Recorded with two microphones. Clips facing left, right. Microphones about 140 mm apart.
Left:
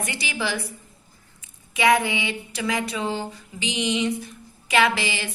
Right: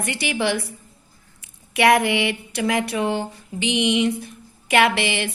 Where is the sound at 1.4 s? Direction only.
70° right (ahead or behind).